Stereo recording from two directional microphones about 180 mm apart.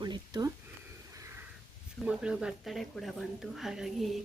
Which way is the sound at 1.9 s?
5° right (ahead or behind).